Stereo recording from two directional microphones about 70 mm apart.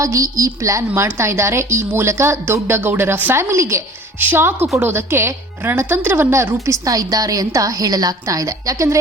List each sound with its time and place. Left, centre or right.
0.0 s a woman's voice: right
4.2 s speech: right
5.8 s a woman's voice: right
6.1 s a woman's voice: right